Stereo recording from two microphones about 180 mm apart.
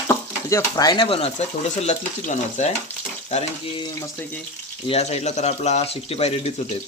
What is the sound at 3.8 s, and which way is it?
Speech, 20° left (ahead or behind).